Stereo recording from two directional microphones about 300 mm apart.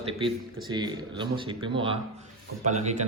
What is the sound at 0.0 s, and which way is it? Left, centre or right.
A man's voice, centre.